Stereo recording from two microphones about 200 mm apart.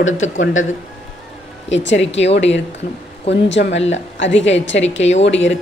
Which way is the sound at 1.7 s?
65° left (ahead or behind).